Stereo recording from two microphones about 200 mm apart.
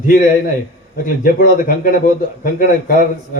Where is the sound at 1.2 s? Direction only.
45° left (ahead or behind).